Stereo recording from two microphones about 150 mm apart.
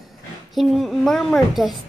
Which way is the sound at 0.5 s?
Centre (ahead or behind).